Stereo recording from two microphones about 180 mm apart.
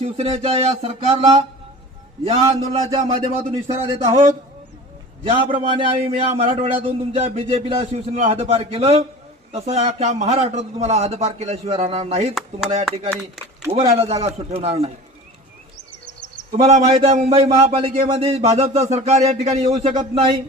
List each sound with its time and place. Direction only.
0.0 s a man's voice: 35° right (ahead or behind)
5.2 s a man's voice: 30° right (ahead or behind)
13.7 s a man's voice: 35° right (ahead or behind)
16.6 s a man's voice: 35° right (ahead or behind)